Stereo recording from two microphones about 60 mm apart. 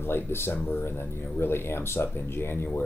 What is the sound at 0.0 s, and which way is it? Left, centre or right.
Speech, left.